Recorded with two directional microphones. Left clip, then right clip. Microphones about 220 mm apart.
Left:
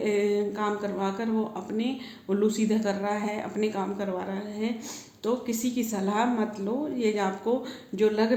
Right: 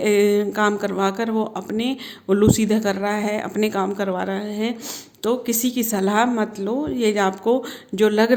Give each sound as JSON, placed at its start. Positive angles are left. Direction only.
{"t": 0.0, "sound": "a woman's voice", "side_deg": -45}